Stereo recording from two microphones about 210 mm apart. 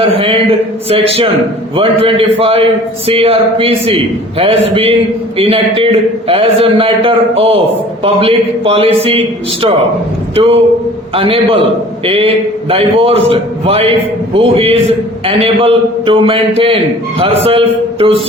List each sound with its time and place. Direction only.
0.0 s a man's voice: 25° right (ahead or behind)